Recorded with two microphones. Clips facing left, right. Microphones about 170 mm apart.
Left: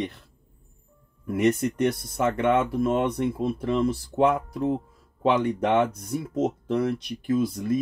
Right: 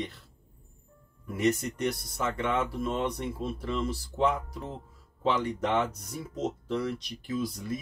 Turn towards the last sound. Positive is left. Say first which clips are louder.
# left 8 dB
turn(degrees=55)  # may be behind; listen again after turning